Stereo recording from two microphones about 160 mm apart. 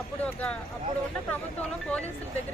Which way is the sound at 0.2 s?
10° left (ahead or behind).